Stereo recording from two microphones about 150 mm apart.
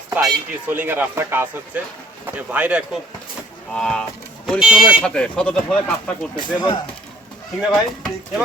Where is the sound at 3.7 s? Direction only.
5° left (ahead or behind).